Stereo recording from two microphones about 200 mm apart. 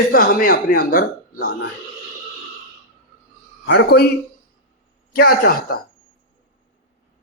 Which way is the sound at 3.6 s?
60° left (ahead or behind).